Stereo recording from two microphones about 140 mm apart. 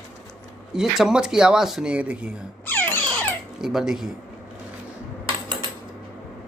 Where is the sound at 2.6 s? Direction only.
15° left (ahead or behind).